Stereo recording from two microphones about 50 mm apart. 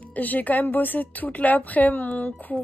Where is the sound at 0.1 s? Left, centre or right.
Left.